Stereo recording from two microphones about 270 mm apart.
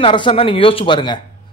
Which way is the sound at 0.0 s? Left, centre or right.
Centre.